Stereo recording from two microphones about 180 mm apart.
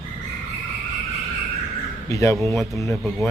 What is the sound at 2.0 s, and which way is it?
Speech, 15° left (ahead or behind).